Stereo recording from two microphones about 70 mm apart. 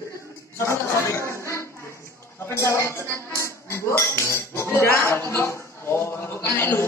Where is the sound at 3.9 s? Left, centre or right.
Left.